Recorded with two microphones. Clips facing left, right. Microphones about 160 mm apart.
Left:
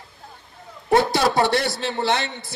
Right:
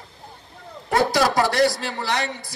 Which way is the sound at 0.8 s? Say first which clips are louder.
Left 1 dB; 25° left (ahead or behind).